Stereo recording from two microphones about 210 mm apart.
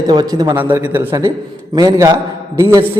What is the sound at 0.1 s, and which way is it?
A man's voice, 20° right (ahead or behind).